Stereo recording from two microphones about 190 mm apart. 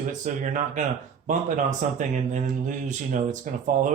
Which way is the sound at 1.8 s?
40° right (ahead or behind).